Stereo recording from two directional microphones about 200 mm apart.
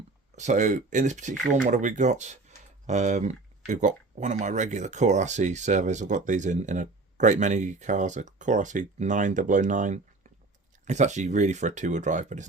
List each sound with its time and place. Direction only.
0.3 s speech: 35° right (ahead or behind)